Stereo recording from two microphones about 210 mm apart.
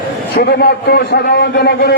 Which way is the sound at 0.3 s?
50° left (ahead or behind).